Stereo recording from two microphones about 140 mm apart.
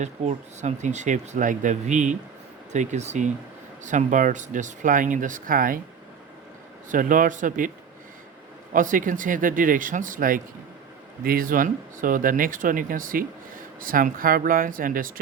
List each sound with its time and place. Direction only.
0.0 s speech: 60° right (ahead or behind); by 5.8 s 85° right
6.9 s speech: 70° right (ahead or behind)
8.7 s speech: 70° right (ahead or behind)
11.2 s speech: 90° right